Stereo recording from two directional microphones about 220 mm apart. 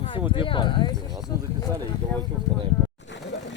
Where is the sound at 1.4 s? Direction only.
15° right (ahead or behind).